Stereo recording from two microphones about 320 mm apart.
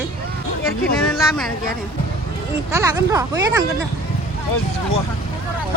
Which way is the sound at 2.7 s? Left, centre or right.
Centre.